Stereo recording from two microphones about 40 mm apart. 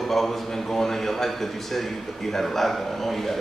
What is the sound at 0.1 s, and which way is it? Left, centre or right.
A man's voice, centre.